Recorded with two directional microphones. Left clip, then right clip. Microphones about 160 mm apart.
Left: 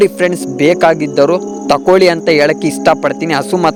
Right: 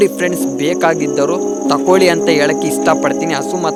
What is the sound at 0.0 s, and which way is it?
Speech, 45° left (ahead or behind).